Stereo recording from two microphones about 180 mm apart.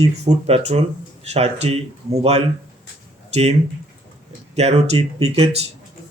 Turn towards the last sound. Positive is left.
turn(degrees=-35)  # may be behind; listen again after turning